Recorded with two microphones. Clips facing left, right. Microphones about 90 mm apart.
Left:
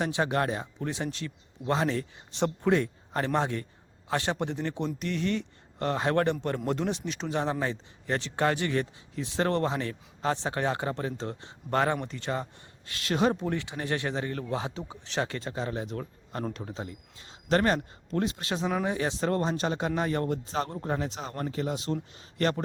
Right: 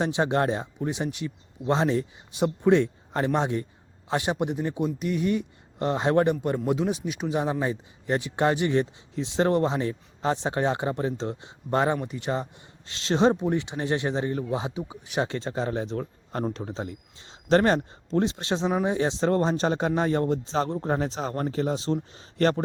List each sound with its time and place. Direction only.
0.0 s a man's voice: 25° right (ahead or behind)
6.7 s a man's voice: 5° right (ahead or behind)
15.3 s speech: 30° right (ahead or behind)